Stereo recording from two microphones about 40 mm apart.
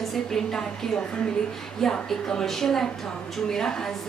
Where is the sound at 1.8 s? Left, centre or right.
Centre.